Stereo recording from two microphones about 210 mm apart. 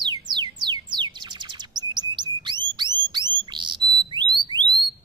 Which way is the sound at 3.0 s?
20° right (ahead or behind).